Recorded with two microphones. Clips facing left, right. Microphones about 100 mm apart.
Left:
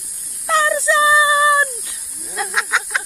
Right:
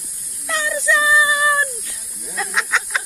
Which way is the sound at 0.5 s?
35° left (ahead or behind).